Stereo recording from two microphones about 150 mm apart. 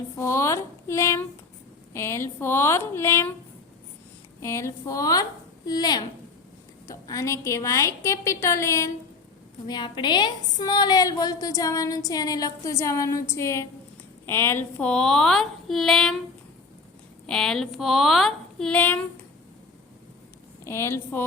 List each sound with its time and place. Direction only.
0.2 s a woman's voice: 20° left (ahead or behind)
4.4 s a woman's voice: 20° left (ahead or behind); by 16.1 s 5° left (ahead or behind)
17.2 s a woman's voice: 5° left (ahead or behind)
20.7 s speech: 15° left (ahead or behind)